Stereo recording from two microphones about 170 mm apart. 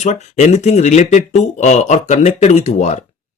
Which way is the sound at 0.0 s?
45° left (ahead or behind).